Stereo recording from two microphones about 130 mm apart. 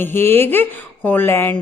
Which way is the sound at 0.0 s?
15° left (ahead or behind).